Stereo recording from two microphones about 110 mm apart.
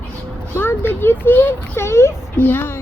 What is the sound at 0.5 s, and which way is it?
A child's voice, 20° left (ahead or behind).